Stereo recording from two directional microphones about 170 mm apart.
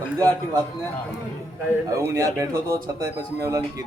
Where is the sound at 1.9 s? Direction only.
15° right (ahead or behind).